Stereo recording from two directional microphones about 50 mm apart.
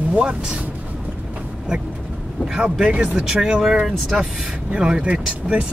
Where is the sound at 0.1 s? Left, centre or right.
Right.